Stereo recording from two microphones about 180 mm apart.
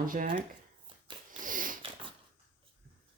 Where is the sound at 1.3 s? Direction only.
50° right (ahead or behind).